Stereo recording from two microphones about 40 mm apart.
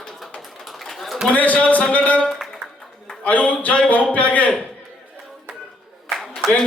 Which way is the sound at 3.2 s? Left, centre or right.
Left.